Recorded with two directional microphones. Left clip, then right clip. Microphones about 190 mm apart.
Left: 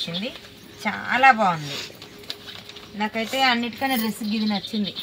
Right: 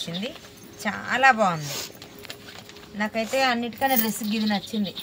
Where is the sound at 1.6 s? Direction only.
65° right (ahead or behind).